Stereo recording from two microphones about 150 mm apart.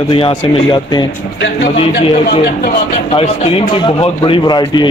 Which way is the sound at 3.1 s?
35° left (ahead or behind).